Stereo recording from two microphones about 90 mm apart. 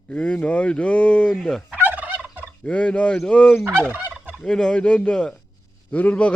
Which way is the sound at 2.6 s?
15° left (ahead or behind).